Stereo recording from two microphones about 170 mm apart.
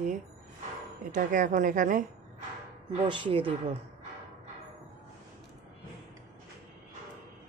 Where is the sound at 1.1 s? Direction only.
50° right (ahead or behind).